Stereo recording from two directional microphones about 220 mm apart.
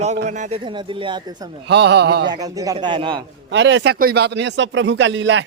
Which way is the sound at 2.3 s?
15° right (ahead or behind).